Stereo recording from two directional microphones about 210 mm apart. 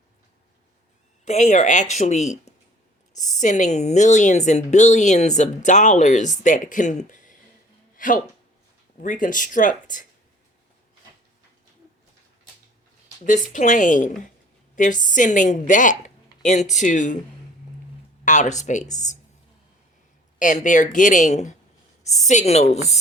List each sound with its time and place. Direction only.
1.2 s speech: 35° left (ahead or behind)
13.2 s speech: 35° left (ahead or behind)
18.3 s speech: 35° left (ahead or behind)
20.4 s speech: 35° left (ahead or behind)